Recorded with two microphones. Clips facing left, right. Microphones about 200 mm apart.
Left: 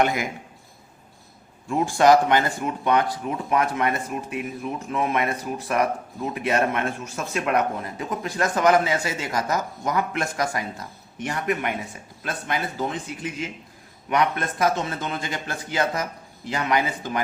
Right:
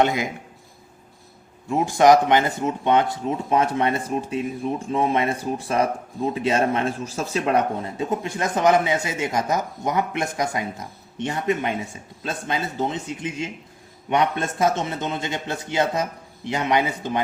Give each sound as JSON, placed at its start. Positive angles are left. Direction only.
{"t": 0.0, "sound": "speech", "side_deg": -20}
{"t": 1.6, "sound": "speech", "side_deg": -20}